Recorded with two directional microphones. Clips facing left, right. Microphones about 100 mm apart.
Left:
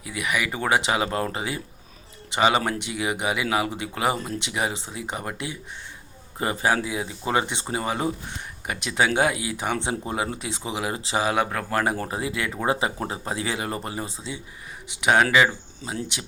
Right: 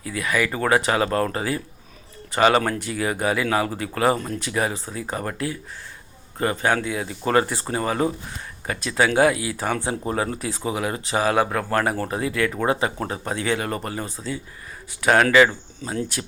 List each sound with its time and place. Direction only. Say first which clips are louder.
0.0 s speech: right 3 dB; 20° left (ahead or behind)